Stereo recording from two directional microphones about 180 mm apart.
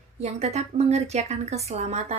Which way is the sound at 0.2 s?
35° right (ahead or behind).